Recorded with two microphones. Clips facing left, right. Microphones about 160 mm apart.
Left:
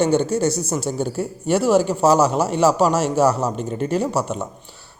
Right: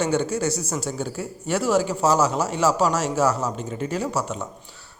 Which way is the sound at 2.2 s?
60° left (ahead or behind).